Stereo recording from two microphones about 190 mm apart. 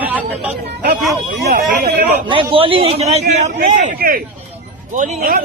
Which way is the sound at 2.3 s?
30° right (ahead or behind).